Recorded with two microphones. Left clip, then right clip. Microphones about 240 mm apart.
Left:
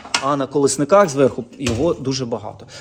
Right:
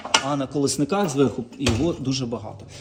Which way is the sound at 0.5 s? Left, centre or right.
Centre.